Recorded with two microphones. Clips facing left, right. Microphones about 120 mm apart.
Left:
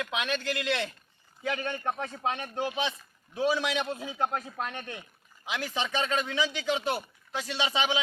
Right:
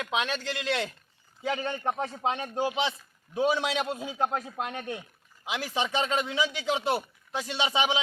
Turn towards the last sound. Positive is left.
turn(degrees=-20)  # may be behind; listen again after turning